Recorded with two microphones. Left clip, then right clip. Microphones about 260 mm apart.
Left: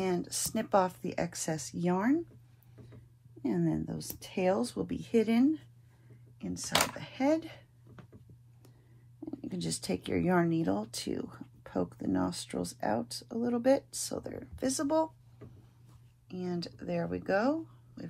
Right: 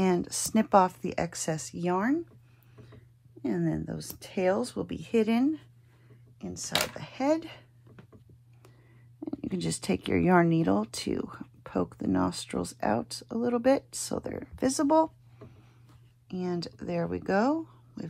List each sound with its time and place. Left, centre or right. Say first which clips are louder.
0.0 s speech: right 5 dB; right
3.4 s speech: right 2 dB; right
6.4 s speech: even; right
9.5 s speech: right 4 dB; right
16.3 s speech: right 4 dB; right